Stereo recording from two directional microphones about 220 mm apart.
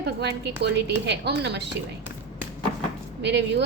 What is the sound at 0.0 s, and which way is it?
A woman's voice, 50° right (ahead or behind).